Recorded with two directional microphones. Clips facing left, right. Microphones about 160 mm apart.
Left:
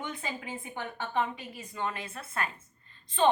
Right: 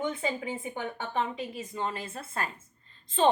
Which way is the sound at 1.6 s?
30° right (ahead or behind).